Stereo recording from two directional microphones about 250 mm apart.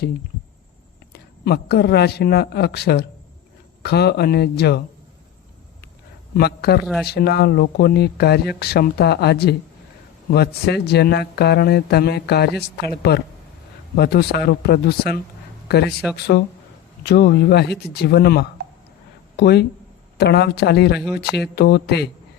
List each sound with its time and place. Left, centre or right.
1.1 s speech: left
6.3 s speech: left
15.9 s speech: centre
16.1 s speech: left